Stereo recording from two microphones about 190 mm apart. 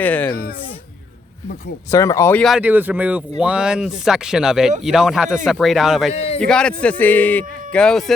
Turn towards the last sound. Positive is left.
turn(degrees=5)  # may be behind; listen again after turning